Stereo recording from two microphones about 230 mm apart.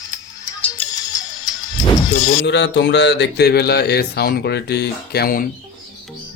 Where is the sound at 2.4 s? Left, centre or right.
Left.